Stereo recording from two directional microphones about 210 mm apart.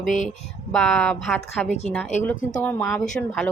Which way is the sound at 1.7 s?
30° left (ahead or behind).